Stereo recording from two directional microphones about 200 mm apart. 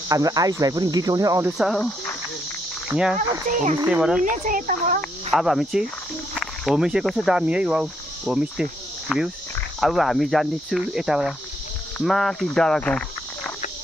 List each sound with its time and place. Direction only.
0.1 s cricket: 15° right (ahead or behind)
1.6 s speech: centre (ahead or behind)
2.9 s speech: 5° right (ahead or behind)
3.4 s speech: 40° right (ahead or behind)
3.8 s speech: 5° right (ahead or behind)
4.2 s speech: 40° right (ahead or behind)
5.3 s speech: centre (ahead or behind)